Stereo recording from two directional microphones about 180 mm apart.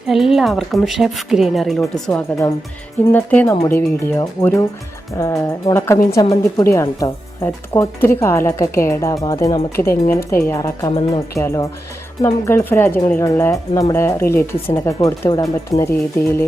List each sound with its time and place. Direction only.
0.1 s speech: centre (ahead or behind)